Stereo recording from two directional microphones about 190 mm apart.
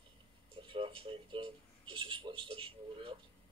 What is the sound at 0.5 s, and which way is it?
Speech, 30° right (ahead or behind).